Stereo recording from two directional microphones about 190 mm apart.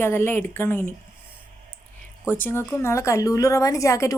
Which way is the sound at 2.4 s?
10° left (ahead or behind).